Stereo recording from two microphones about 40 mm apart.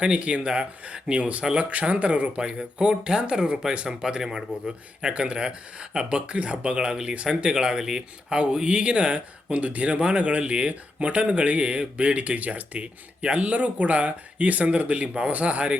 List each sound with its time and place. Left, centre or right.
0.0 s speech: right
2.4 s speech: right
8.4 s speech: right
12.2 s speech: right